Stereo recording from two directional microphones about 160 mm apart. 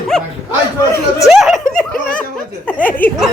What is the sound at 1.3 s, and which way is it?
Snicker, centre (ahead or behind).